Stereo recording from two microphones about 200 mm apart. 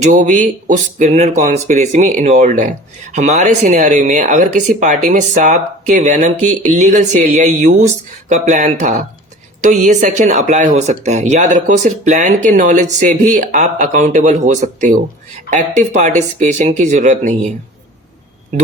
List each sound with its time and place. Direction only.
0.0 s speech: 40° right (ahead or behind)